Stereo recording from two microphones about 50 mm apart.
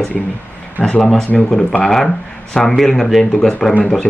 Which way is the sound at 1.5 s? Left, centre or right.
Centre.